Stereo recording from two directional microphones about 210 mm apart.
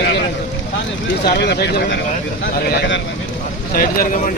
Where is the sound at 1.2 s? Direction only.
50° left (ahead or behind).